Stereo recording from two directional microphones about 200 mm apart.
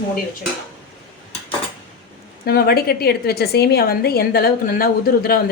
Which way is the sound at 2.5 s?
50° left (ahead or behind).